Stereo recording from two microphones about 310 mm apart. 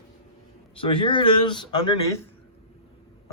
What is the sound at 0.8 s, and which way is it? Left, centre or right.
Speech, centre.